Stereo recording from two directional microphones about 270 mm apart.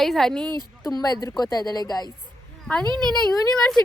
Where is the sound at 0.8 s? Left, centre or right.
Centre.